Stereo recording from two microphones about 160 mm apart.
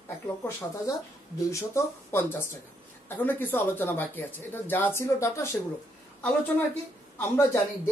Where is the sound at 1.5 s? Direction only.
20° left (ahead or behind).